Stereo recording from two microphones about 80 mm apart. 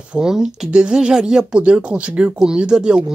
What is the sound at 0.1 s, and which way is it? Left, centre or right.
Speech, centre.